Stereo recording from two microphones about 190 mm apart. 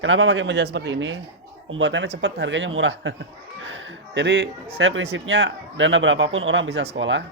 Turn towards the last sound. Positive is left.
turn(degrees=-75)  # may be behind; listen again after turning